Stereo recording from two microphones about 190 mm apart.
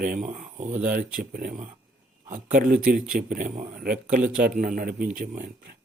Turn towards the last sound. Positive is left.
turn(degrees=-50)  # may be behind; listen again after turning